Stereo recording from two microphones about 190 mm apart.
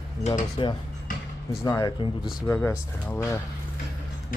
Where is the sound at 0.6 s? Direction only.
25° left (ahead or behind).